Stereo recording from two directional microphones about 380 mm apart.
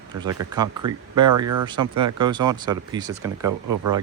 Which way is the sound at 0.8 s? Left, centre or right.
Right.